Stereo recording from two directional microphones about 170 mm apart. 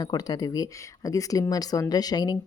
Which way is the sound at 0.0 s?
25° left (ahead or behind).